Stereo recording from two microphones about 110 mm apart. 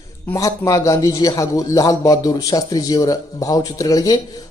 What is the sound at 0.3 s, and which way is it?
A man's voice, 30° left (ahead or behind).